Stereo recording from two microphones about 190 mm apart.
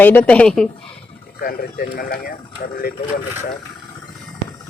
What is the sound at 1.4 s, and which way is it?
Speech, 50° left (ahead or behind).